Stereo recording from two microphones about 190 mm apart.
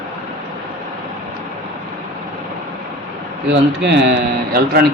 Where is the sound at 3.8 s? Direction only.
65° right (ahead or behind).